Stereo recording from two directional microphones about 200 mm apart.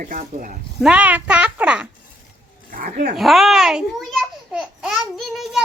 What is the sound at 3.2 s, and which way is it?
A child's voice, centre (ahead or behind).